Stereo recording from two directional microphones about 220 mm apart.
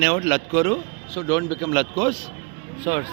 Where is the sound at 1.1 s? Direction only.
15° left (ahead or behind).